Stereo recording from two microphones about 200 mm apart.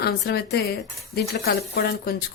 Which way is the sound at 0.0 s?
55° left (ahead or behind).